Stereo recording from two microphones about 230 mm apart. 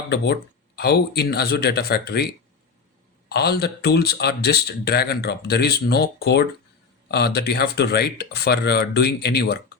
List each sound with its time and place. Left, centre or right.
0.8 s speech: left